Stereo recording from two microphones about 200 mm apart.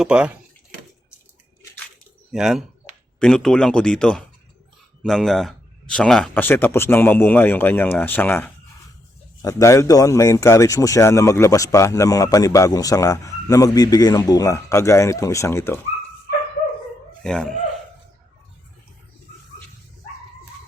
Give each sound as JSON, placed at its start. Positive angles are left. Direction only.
{"t": 0.0, "sound": "speech", "side_deg": -5}
{"t": 2.3, "sound": "a man's voice", "side_deg": 0}
{"t": 17.2, "sound": "speech", "side_deg": 5}